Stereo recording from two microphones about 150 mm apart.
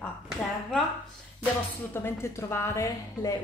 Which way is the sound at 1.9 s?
15° left (ahead or behind).